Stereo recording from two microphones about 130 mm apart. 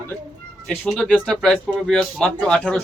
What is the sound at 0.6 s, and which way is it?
Speech, 5° left (ahead or behind).